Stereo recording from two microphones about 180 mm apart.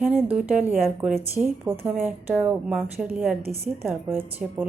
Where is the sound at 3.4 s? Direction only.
60° right (ahead or behind).